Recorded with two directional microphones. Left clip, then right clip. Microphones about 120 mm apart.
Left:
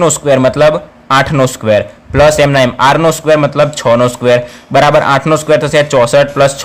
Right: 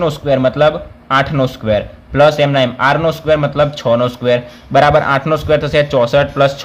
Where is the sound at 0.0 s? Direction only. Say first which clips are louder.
Left 5 dB; 40° left (ahead or behind).